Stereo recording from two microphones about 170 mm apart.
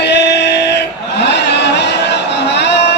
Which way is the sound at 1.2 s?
90° left.